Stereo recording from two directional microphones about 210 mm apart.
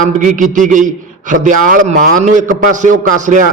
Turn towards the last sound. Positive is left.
turn(degrees=-35)  # may be behind; listen again after turning